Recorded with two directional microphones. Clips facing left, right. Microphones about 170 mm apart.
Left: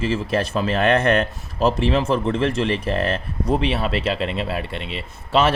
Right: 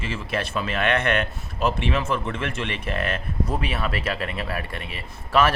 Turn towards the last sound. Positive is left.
turn(degrees=25)  # may be behind; listen again after turning